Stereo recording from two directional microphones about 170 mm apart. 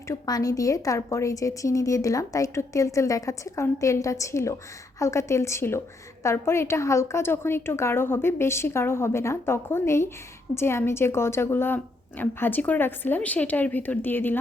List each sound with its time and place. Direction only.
0.1 s a woman's voice: 20° left (ahead or behind)